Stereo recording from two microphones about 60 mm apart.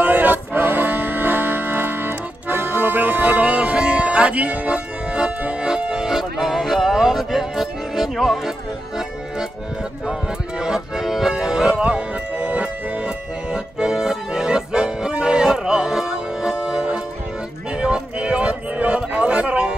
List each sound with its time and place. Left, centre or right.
0.0 s music: right; by 9.5 s centre
10.6 s music: centre
17.7 s a sound: centre